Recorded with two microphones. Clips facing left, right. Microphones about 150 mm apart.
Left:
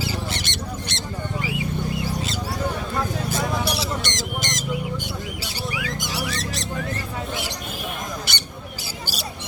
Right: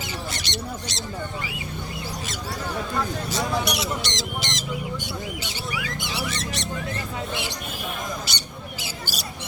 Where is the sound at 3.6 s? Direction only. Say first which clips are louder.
Left 1 dB; 30° left (ahead or behind).